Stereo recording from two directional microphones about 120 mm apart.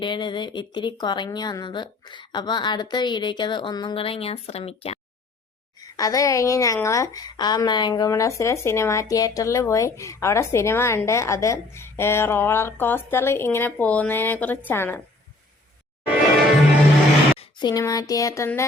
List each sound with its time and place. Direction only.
0.0 s speech: 40° left (ahead or behind); by 4.9 s 55° left (ahead or behind)
6.0 s speech: 30° left (ahead or behind)
17.6 s speech: 30° left (ahead or behind)